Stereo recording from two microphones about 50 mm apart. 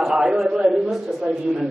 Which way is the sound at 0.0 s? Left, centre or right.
Centre.